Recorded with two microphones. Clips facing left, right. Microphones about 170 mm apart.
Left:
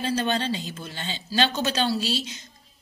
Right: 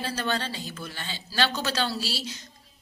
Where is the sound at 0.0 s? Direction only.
20° left (ahead or behind).